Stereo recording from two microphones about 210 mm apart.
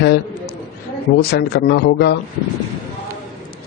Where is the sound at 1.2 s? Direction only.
50° left (ahead or behind).